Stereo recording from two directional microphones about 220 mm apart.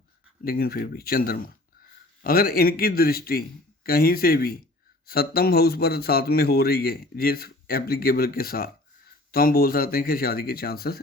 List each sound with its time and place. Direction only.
0.4 s a man's voice: 45° left (ahead or behind)